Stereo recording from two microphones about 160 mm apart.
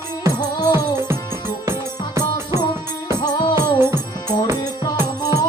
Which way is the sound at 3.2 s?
25° left (ahead or behind).